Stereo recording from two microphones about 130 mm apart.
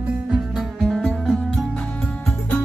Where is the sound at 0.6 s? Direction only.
Centre (ahead or behind).